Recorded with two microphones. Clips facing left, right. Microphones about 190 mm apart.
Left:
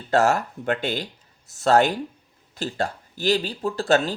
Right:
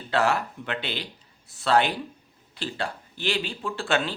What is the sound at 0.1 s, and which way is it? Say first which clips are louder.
Speech: left 4 dB; 45° left (ahead or behind).